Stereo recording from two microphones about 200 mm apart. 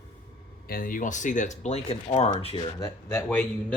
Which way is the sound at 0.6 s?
45° left (ahead or behind).